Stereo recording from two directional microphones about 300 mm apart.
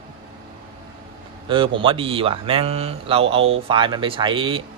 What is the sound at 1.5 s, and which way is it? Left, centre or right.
Speech, centre.